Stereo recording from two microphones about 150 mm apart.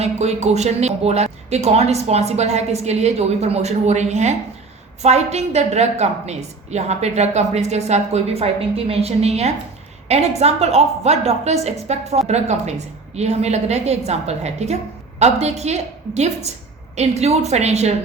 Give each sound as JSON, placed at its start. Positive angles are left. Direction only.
{"t": 0.0, "sound": "a woman's voice", "side_deg": -45}